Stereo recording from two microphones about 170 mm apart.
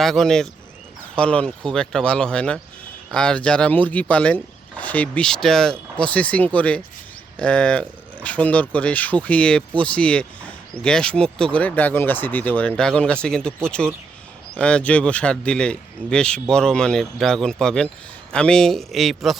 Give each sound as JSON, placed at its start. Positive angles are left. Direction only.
{"t": 0.0, "sound": "speech", "side_deg": 0}